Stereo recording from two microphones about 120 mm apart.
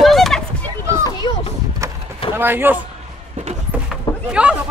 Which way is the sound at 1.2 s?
40° left (ahead or behind).